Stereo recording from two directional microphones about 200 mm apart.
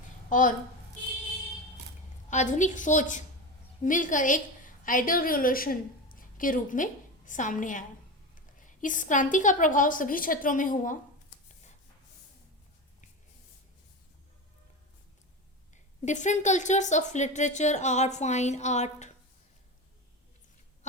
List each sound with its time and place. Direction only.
0.3 s a woman's voice: 40° left (ahead or behind)
2.3 s a woman's voice: 40° left (ahead or behind)
15.7 s a woman's voice: 35° left (ahead or behind)